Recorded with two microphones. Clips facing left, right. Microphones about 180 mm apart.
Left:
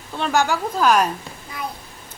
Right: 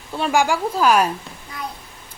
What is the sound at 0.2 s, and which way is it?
Speech, 10° right (ahead or behind).